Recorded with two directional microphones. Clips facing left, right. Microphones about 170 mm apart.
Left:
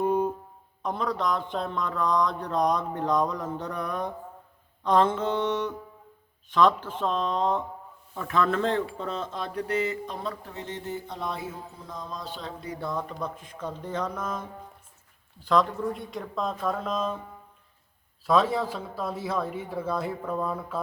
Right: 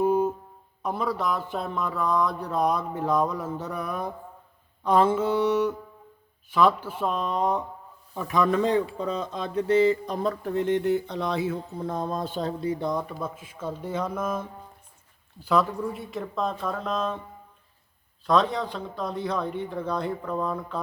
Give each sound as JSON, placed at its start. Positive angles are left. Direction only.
{"t": 0.0, "sound": "a sound", "side_deg": -5}
{"t": 0.8, "sound": "mantra", "side_deg": -10}
{"t": 10.2, "sound": "speech", "side_deg": -55}
{"t": 12.6, "sound": "mantra", "side_deg": -20}
{"t": 15.4, "sound": "speech", "side_deg": -5}
{"t": 18.3, "sound": "speech", "side_deg": 5}